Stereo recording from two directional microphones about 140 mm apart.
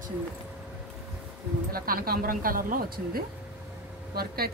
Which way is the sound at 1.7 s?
90° right.